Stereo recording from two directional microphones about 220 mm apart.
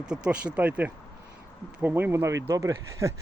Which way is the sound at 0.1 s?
5° right (ahead or behind).